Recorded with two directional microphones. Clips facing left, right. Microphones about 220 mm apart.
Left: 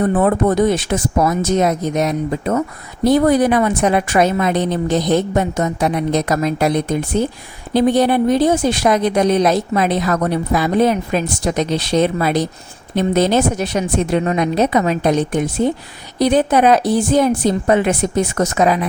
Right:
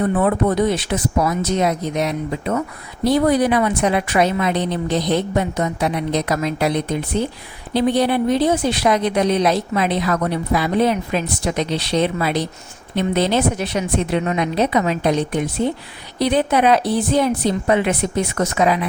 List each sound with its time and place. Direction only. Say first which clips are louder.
0.0 s speech: left 3 dB; 45° left (ahead or behind)